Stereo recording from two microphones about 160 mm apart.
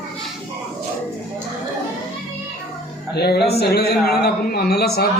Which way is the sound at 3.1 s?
90° left.